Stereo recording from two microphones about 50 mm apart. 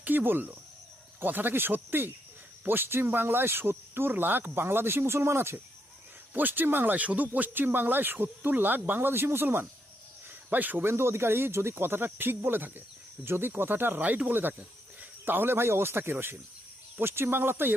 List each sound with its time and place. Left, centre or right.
0.0 s speech: right
6.3 s speech: right
10.5 s speech: right
10.8 s speech: right
14.0 s speech: right